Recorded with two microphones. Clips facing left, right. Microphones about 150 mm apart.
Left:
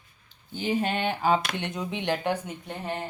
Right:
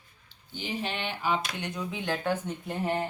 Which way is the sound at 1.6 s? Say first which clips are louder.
Left 3 dB; 25° left (ahead or behind).